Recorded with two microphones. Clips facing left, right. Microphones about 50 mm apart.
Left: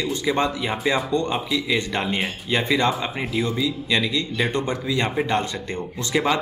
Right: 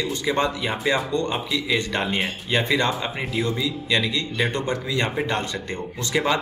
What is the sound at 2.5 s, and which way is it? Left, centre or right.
Speech, left.